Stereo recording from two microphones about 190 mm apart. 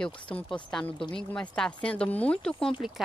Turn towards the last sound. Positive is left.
turn(degrees=0)  # may be behind; listen again after turning